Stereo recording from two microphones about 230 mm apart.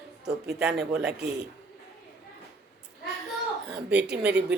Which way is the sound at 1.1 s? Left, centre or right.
Right.